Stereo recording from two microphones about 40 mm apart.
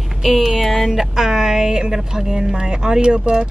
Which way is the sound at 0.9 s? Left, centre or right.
Centre.